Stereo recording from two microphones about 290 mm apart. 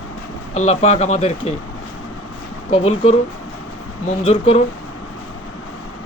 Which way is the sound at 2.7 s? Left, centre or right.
Left.